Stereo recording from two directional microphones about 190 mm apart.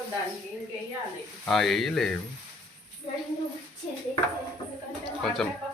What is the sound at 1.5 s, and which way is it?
Speech, centre (ahead or behind).